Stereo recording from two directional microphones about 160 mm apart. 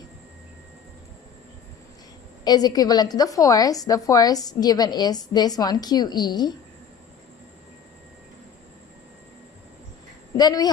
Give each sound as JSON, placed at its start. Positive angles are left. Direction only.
{"t": 2.4, "sound": "a woman's voice", "side_deg": 25}
{"t": 10.3, "sound": "speech", "side_deg": 25}